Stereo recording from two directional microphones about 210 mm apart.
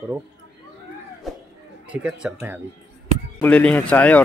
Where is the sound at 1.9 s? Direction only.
5° right (ahead or behind).